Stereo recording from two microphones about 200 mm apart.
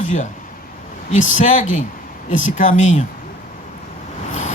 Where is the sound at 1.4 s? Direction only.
40° left (ahead or behind).